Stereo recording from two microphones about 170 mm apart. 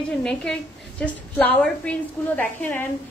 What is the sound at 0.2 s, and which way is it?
A woman's voice, 5° left (ahead or behind).